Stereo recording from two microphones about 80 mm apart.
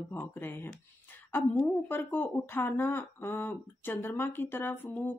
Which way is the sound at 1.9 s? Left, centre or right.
Left.